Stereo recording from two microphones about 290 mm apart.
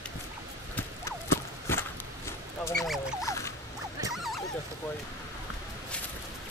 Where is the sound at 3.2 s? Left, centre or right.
Centre.